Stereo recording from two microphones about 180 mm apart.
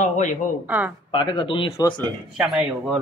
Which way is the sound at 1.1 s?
25° left (ahead or behind).